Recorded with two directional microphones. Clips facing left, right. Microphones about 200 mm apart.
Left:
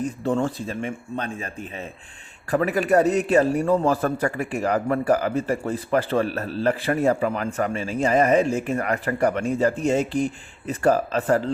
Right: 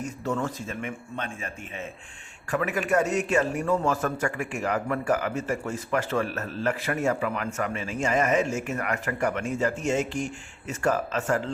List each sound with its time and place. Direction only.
0.0 s a man's voice: 30° left (ahead or behind)